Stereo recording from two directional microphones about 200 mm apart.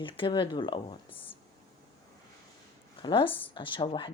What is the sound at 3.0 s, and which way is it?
Speech, 25° left (ahead or behind).